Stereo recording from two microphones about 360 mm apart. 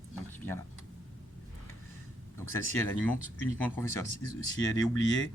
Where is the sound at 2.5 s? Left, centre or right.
Centre.